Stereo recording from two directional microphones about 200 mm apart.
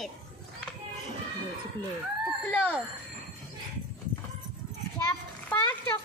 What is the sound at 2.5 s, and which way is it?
Speech, 10° left (ahead or behind).